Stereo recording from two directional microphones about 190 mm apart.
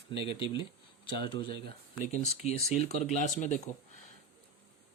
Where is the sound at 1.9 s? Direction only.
35° left (ahead or behind).